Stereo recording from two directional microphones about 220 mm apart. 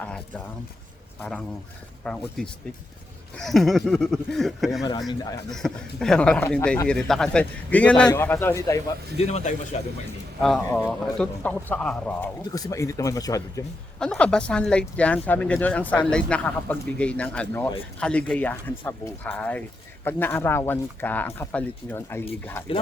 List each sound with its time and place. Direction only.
0.0 s speech: 5° left (ahead or behind)
3.4 s speech: centre (ahead or behind)
4.8 s speech: 15° left (ahead or behind)
5.5 s speech: centre (ahead or behind)
9.1 s speech: 30° left (ahead or behind)
10.7 s speech: 15° left (ahead or behind)
12.5 s speech: 15° left (ahead or behind)
14.0 s speech: 5° left (ahead or behind)